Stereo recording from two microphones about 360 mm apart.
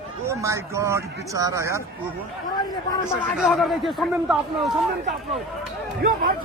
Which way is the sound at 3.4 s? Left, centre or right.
Centre.